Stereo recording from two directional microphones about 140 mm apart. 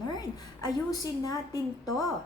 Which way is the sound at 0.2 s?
25° left (ahead or behind).